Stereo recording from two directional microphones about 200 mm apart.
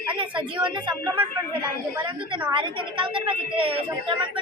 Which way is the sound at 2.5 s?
25° right (ahead or behind).